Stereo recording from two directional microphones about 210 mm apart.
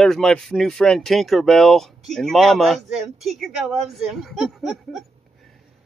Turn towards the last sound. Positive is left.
turn(degrees=0)  # may be behind; listen again after turning